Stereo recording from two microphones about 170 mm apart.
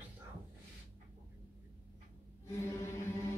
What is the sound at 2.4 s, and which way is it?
Chant, 15° left (ahead or behind).